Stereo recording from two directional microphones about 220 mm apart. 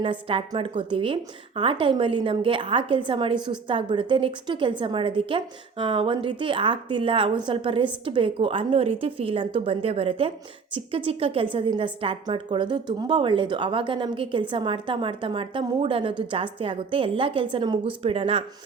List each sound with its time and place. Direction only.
0.0 s a woman's voice: 25° right (ahead or behind)